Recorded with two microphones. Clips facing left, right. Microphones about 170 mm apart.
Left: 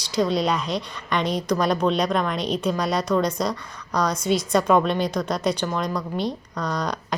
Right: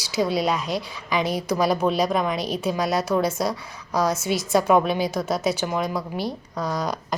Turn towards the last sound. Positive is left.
turn(degrees=-5)  # may be behind; listen again after turning